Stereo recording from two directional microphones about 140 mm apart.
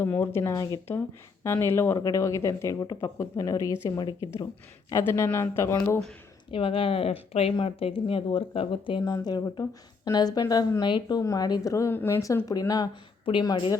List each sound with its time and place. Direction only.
0.0 s speech: 15° left (ahead or behind)
6.5 s speech: 40° left (ahead or behind)